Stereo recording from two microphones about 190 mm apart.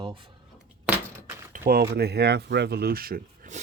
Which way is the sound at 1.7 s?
55° right (ahead or behind).